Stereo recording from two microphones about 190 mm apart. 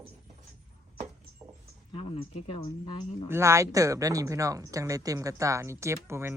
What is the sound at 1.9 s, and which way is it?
Speech, 30° left (ahead or behind).